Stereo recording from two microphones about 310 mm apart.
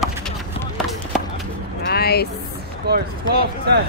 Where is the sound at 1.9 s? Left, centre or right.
Left.